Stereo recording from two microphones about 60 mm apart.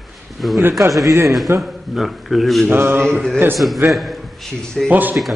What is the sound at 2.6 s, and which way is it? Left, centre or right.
Mantra, right.